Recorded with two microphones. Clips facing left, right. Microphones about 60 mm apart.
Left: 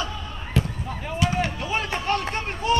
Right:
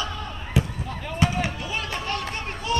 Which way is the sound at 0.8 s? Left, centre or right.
Centre.